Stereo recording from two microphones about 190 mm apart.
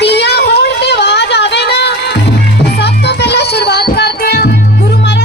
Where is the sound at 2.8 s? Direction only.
60° left (ahead or behind).